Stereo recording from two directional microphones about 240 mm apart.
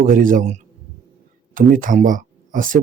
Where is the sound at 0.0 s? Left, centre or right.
Right.